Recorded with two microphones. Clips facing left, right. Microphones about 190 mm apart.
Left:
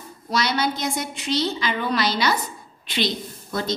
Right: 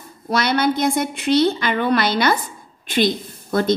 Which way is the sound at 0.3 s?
55° right (ahead or behind).